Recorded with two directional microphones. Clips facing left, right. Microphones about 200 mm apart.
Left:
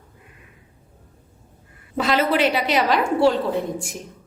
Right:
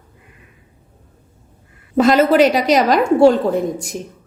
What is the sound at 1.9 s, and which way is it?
A woman's voice, 45° right (ahead or behind).